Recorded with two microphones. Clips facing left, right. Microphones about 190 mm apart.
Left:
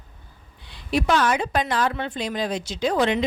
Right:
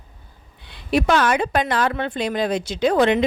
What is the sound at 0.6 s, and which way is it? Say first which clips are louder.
A woman's voice: right 3 dB; 60° right (ahead or behind).